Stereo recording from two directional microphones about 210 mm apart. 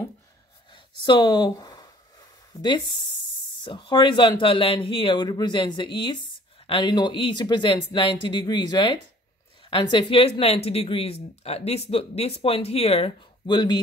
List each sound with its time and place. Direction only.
1.0 s speech: 20° left (ahead or behind)